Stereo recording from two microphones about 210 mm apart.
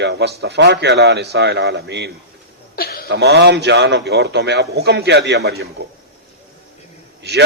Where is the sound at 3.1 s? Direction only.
55° right (ahead or behind).